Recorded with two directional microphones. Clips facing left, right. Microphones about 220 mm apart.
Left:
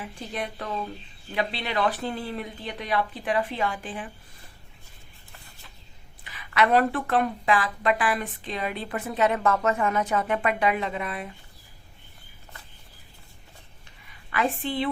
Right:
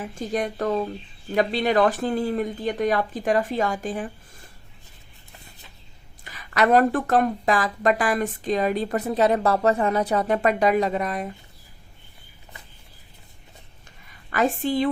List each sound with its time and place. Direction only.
0.0 s speech: 45° right (ahead or behind)
6.2 s speech: 45° right (ahead or behind)
14.3 s speech: 45° right (ahead or behind)